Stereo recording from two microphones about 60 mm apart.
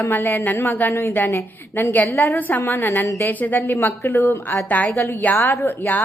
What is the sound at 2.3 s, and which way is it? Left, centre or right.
Speech, left.